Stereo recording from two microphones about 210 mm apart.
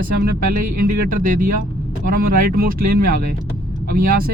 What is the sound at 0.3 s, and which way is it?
Speech, 40° right (ahead or behind).